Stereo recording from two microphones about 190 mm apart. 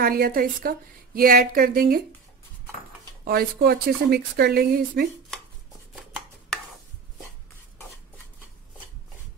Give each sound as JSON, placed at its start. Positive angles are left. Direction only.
{"t": 0.0, "sound": "a woman's voice", "side_deg": -50}
{"t": 3.3, "sound": "a woman's voice", "side_deg": -55}